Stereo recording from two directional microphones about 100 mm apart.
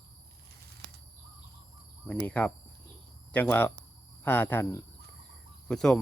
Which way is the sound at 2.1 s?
15° left (ahead or behind).